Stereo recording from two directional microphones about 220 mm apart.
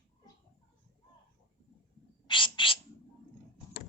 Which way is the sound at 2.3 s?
20° left (ahead or behind).